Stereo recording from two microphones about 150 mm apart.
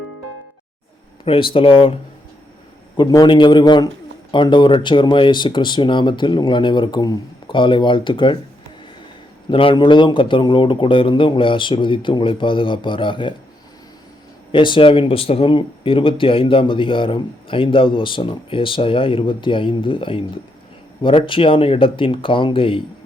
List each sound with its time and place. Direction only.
1.2 s speech: 35° left (ahead or behind)
3.0 s speech: 30° left (ahead or behind)
9.5 s speech: 35° left (ahead or behind)
14.5 s speech: 35° left (ahead or behind)